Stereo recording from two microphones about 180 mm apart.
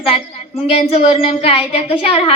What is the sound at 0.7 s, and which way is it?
A woman's voice, 35° left (ahead or behind).